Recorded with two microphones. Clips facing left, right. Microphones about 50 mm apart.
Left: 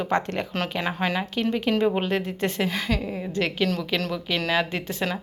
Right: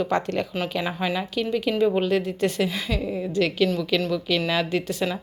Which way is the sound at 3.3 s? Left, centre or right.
Left.